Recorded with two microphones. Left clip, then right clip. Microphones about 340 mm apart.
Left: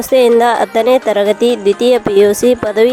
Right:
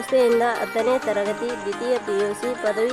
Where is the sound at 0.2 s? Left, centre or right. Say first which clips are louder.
Left 10 dB; left.